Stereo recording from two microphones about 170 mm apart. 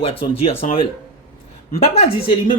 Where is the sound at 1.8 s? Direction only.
35° left (ahead or behind).